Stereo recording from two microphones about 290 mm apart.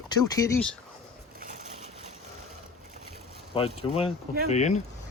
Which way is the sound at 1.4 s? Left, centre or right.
Right.